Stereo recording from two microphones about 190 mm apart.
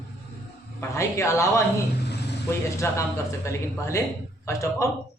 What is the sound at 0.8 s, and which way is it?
A man's voice, 15° left (ahead or behind).